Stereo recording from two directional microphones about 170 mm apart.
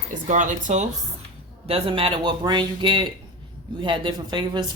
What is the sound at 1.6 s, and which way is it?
Speech, 35° right (ahead or behind).